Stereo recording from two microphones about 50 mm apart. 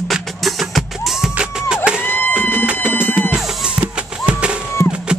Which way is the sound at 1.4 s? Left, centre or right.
Centre.